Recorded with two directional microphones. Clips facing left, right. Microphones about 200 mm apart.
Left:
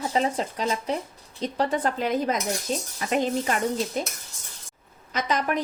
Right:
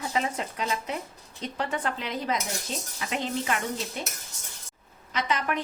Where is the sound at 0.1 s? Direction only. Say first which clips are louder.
Left 4 dB; 35° left (ahead or behind).